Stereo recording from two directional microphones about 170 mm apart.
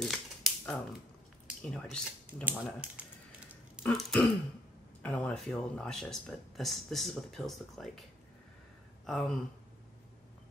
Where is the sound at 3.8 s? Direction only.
5° left (ahead or behind).